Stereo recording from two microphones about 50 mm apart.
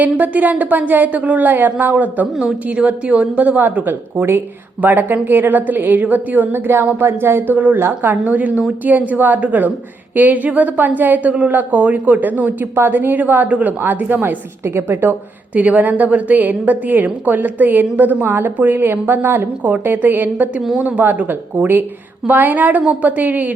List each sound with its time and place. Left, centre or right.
0.2 s a woman's voice: right
6.5 s speech: right
7.5 s a woman's voice: right
7.8 s speech: right
8.1 s a woman's voice: right
14.6 s a woman's voice: right
15.5 s a woman's voice: right
18.3 s speech: right
18.5 s a woman's voice: right